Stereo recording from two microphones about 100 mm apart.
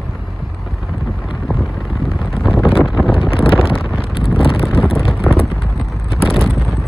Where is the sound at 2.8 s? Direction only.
5° right (ahead or behind).